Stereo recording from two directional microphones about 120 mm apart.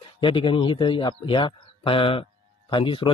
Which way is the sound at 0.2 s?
45° left (ahead or behind).